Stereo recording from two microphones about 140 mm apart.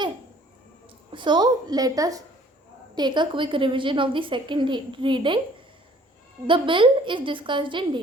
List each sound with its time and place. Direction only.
1.1 s a woman's voice: 35° right (ahead or behind)
6.5 s a woman's voice: 35° right (ahead or behind)